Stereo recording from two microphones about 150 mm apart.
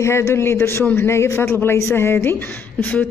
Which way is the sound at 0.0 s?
20° left (ahead or behind).